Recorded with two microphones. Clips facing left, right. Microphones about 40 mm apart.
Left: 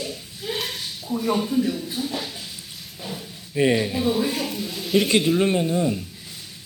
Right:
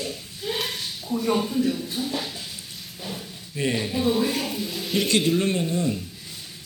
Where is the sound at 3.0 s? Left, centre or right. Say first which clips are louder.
Left 1 dB; centre.